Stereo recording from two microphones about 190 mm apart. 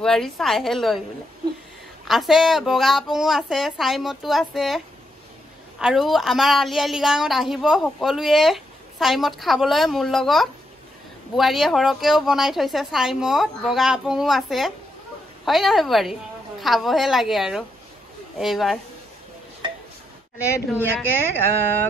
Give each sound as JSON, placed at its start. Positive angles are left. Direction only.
{"t": 0.0, "sound": "a woman's voice", "side_deg": 0}
{"t": 2.0, "sound": "a woman's voice", "side_deg": 0}
{"t": 19.6, "sound": "a sound", "side_deg": -25}
{"t": 21.2, "sound": "speech", "side_deg": 10}